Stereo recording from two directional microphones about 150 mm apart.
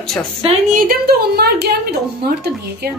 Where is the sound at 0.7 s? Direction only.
80° right.